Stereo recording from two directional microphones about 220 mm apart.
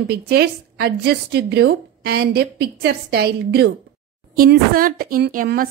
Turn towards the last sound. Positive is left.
turn(degrees=-40)  # may be behind; listen again after turning